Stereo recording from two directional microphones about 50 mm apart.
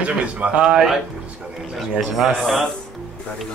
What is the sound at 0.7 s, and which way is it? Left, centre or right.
A man's voice, centre.